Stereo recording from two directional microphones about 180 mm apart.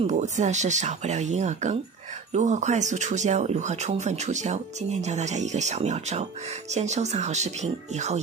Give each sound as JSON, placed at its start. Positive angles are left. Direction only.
{"t": 0.0, "sound": "speech", "side_deg": -40}